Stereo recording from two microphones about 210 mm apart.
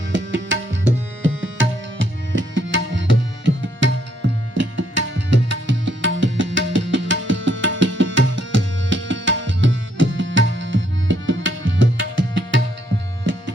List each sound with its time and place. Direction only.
0.1 s tabla: 60° right (ahead or behind)
4.5 s music: 65° right (ahead or behind)